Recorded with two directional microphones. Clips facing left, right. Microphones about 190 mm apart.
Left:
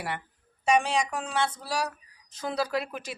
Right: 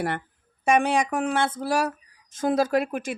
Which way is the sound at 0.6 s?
55° right (ahead or behind).